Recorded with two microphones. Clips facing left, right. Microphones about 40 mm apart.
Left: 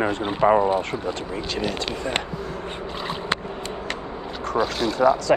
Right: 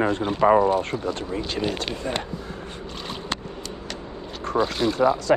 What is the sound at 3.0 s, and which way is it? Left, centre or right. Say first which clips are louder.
Boat: left 5 dB; centre.